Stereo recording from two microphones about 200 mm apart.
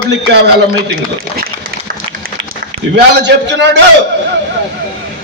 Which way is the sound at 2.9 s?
60° right (ahead or behind).